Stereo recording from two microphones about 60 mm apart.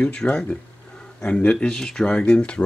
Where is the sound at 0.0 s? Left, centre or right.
Left.